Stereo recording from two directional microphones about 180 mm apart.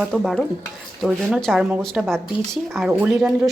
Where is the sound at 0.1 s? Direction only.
Centre (ahead or behind).